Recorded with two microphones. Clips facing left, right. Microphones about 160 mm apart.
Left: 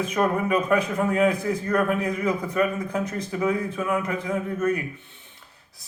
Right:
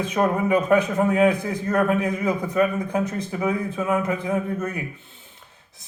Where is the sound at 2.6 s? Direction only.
30° right (ahead or behind).